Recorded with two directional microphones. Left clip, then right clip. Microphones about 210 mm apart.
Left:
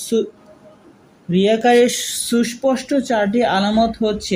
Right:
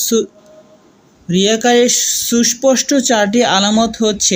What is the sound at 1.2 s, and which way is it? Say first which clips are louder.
Speech: right 2 dB; 25° right (ahead or behind).